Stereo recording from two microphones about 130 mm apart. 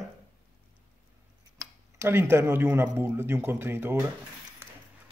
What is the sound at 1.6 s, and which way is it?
Speech, 20° right (ahead or behind).